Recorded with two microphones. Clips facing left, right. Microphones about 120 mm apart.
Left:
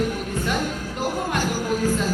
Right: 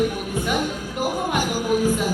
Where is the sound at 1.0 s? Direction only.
15° right (ahead or behind).